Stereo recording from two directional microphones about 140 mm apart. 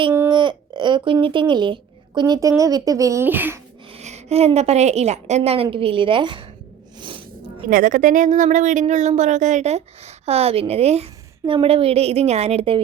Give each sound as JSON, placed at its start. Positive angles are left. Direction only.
{"t": 0.3, "sound": "speech", "side_deg": -30}
{"t": 3.9, "sound": "a woman's voice", "side_deg": -50}
{"t": 7.0, "sound": "a sound", "side_deg": -35}
{"t": 7.7, "sound": "speech", "side_deg": -75}